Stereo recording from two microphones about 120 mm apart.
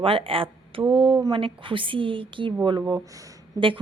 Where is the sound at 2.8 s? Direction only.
25° right (ahead or behind).